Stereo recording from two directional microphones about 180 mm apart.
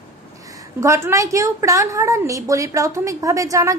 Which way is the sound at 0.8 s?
15° right (ahead or behind).